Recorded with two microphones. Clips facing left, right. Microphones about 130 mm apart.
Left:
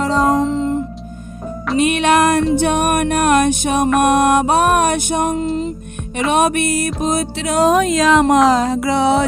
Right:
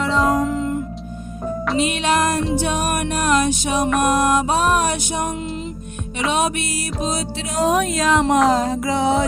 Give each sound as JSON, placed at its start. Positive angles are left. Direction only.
{"t": 0.0, "sound": "music", "side_deg": 40}
{"t": 0.3, "sound": "music", "side_deg": 25}
{"t": 1.8, "sound": "music", "side_deg": 60}
{"t": 5.3, "sound": "music", "side_deg": 35}
{"t": 6.3, "sound": "speech", "side_deg": 55}
{"t": 8.3, "sound": "music", "side_deg": 90}